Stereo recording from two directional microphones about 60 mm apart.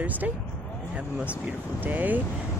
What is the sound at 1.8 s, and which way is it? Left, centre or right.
Speech, right.